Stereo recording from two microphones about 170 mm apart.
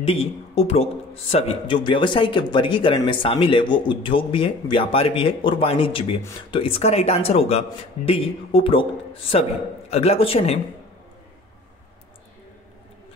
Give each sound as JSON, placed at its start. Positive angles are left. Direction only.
{"t": 0.0, "sound": "a man's voice", "side_deg": 35}